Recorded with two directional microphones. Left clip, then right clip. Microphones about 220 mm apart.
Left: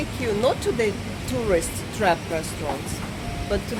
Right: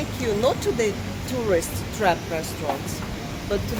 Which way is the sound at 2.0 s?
15° left (ahead or behind).